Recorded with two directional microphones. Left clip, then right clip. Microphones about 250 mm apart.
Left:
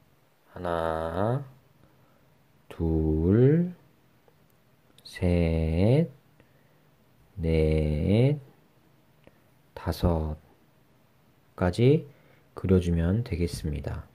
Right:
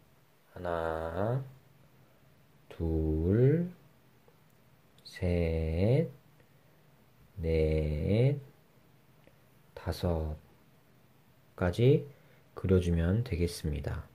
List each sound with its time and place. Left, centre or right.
0.5 s a sound: centre
2.7 s a sound: centre
5.0 s mantra: centre
7.4 s mantra: centre
9.8 s speech: centre
11.5 s speech: centre